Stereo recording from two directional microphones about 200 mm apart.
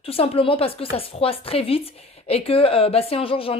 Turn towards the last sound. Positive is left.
turn(degrees=25)  # may be behind; listen again after turning